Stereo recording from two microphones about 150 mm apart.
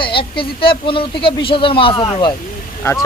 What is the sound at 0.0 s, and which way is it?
Speech, 35° left (ahead or behind).